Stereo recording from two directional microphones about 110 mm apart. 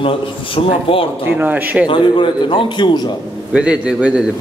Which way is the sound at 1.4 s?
15° right (ahead or behind).